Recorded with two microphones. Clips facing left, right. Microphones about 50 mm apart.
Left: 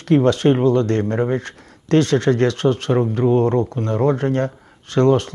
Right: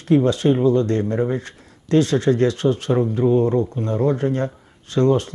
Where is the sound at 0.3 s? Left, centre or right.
Left.